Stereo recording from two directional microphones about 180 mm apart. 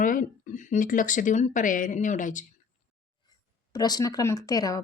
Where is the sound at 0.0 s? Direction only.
50° left (ahead or behind).